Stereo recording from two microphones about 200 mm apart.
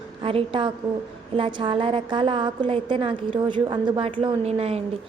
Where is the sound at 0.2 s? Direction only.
25° right (ahead or behind).